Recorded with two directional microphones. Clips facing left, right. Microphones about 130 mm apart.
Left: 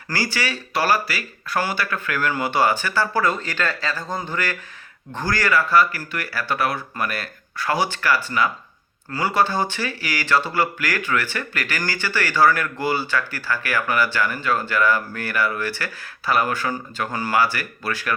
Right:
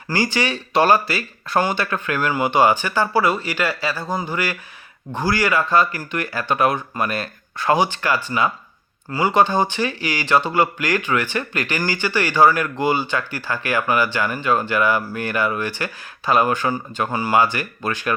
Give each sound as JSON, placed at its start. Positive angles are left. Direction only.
{"t": 0.1, "sound": "speech", "side_deg": -20}